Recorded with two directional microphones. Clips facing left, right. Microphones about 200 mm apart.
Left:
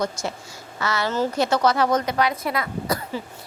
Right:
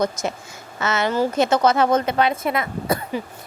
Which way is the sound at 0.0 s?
20° right (ahead or behind).